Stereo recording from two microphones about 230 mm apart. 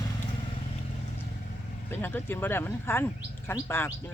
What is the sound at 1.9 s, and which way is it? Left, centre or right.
Speech, centre.